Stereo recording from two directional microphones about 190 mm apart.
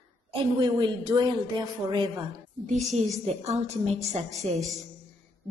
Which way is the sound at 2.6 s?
40° right (ahead or behind).